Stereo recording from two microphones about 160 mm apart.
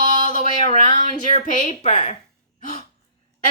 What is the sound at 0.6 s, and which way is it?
Speech, 50° right (ahead or behind).